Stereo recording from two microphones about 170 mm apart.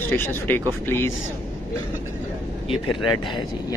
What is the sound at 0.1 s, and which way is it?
Speech, 10° left (ahead or behind).